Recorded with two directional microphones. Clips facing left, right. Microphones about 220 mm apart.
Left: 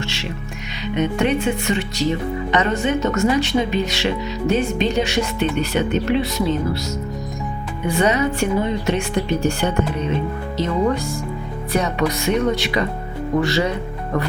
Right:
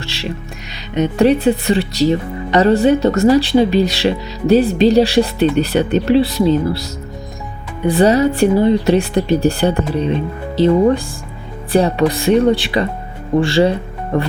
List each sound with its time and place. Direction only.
0.9 s speech: 35° right (ahead or behind)
7.9 s speech: 35° right (ahead or behind)